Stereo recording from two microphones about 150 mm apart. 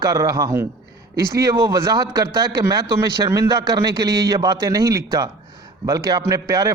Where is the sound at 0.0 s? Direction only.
20° right (ahead or behind).